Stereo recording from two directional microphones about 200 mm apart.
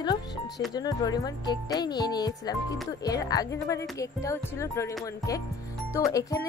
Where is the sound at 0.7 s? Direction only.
20° left (ahead or behind).